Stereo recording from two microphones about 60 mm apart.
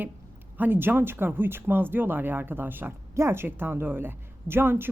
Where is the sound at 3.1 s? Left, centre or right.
Right.